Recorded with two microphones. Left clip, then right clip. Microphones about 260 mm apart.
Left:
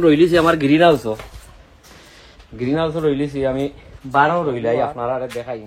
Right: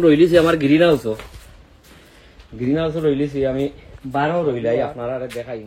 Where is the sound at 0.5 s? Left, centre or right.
Centre.